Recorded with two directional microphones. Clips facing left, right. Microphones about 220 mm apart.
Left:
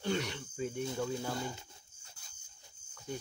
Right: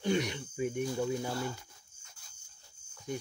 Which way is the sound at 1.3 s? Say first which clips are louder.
Right 3 dB; 20° left (ahead or behind).